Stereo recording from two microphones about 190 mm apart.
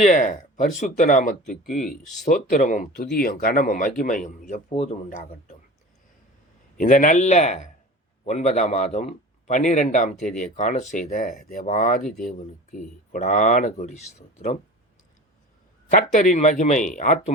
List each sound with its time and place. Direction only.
0.0 s a man's voice: 40° left (ahead or behind)
1.7 s speech: centre (ahead or behind)
2.2 s speech: 40° left (ahead or behind)
4.7 s a man's voice: 30° left (ahead or behind)
5.0 s speech: 45° left (ahead or behind)
6.7 s a man's voice: 45° left (ahead or behind)
15.9 s a man's voice: 45° left (ahead or behind)